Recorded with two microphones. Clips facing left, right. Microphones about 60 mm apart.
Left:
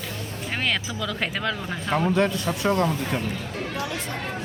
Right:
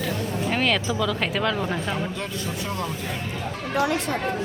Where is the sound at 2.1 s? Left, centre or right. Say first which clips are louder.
Left 7 dB; left.